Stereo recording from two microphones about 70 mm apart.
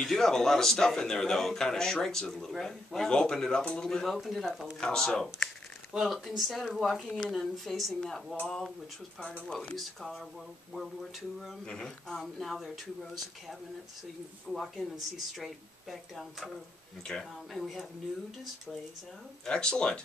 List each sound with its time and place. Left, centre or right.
0.0 s speech: centre
5.9 s speech: centre
9.8 s speech: centre
11.6 s speech: centre
19.4 s speech: centre